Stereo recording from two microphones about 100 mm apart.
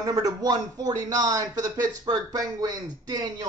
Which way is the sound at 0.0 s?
40° right (ahead or behind).